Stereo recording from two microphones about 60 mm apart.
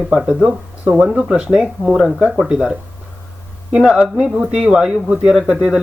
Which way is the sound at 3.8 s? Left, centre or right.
Centre.